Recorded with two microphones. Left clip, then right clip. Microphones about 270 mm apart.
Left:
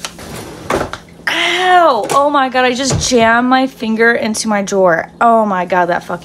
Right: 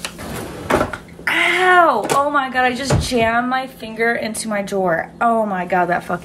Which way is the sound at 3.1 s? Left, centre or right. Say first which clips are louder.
Left 8 dB; centre.